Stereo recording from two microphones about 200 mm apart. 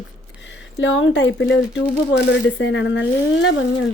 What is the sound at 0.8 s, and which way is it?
Speech, 65° left (ahead or behind).